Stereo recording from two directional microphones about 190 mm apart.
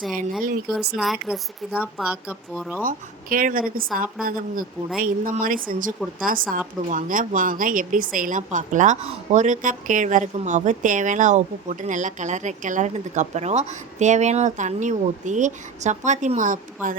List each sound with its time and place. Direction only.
0.9 s speech: centre (ahead or behind)
2.8 s a woman's voice: 45° right (ahead or behind)